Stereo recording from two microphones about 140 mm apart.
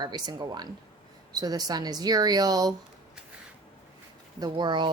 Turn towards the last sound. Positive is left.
turn(degrees=-35)  # may be behind; listen again after turning